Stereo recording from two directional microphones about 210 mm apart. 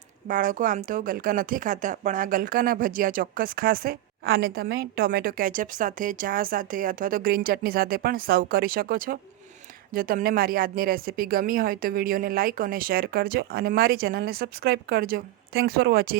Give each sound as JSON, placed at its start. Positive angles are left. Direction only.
{"t": 0.3, "sound": "speech", "side_deg": -40}